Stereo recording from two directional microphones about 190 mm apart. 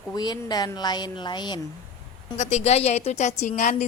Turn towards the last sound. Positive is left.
turn(degrees=40)  # may be behind; listen again after turning